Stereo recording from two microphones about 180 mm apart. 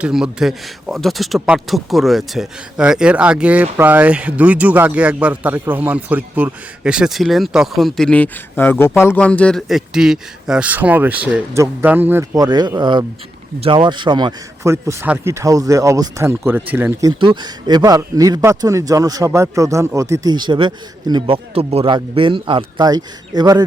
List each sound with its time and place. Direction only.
0.0 s speech: 5° right (ahead or behind)
12.5 s a man's voice: 25° right (ahead or behind)